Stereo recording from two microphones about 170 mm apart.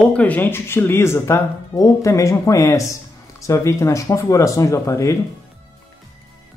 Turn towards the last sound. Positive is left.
turn(degrees=20)  # may be behind; listen again after turning